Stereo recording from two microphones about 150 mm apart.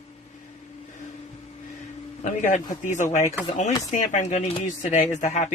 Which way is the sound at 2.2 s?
55° left (ahead or behind).